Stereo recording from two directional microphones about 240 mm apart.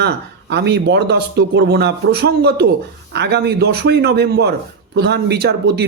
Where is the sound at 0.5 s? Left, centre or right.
Right.